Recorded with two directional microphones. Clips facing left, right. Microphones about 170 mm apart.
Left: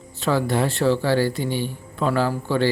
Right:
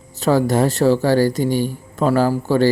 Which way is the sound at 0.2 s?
40° right (ahead or behind).